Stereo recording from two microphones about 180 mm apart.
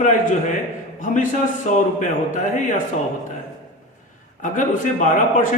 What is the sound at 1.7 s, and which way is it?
A man's voice, 45° left (ahead or behind).